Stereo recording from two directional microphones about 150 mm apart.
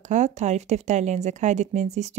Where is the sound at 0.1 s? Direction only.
50° right (ahead or behind).